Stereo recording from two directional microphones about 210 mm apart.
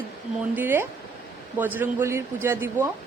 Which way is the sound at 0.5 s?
10° right (ahead or behind).